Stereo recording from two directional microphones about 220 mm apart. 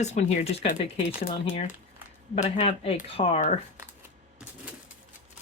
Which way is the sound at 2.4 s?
30° left (ahead or behind).